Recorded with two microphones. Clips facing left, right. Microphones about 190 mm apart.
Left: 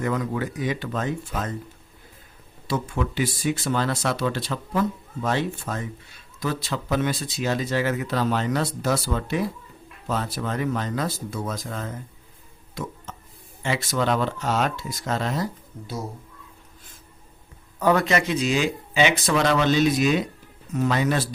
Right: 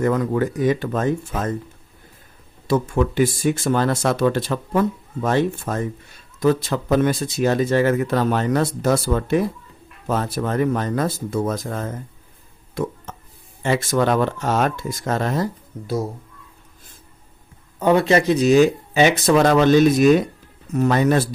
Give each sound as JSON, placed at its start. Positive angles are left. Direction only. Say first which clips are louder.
{"t": 0.0, "sound": "speech", "louder": "right 6 dB", "side_deg": -50}
{"t": 2.6, "sound": "speech", "louder": "right 7 dB", "side_deg": -50}
{"t": 12.7, "sound": "a sound", "louder": "right 8 dB", "side_deg": -55}
{"t": 13.6, "sound": "speech", "louder": "right 6 dB", "side_deg": -50}
{"t": 17.7, "sound": "speech", "louder": "right 5 dB", "side_deg": -25}